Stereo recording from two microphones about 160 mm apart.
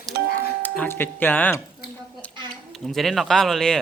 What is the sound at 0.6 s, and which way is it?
Speech, 10° left (ahead or behind).